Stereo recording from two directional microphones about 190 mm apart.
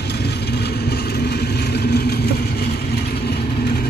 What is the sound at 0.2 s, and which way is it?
Vehicle, 60° left (ahead or behind).